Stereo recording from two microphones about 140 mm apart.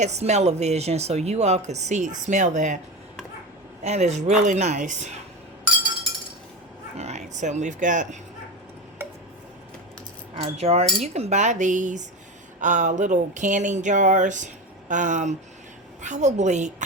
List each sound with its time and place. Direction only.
0.0 s speech: 55° right (ahead or behind)
3.8 s speech: 55° right (ahead or behind)
7.0 s speech: 55° right (ahead or behind)
10.3 s speech: 45° right (ahead or behind)